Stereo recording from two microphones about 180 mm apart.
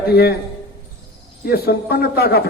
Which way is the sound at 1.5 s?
60° left (ahead or behind).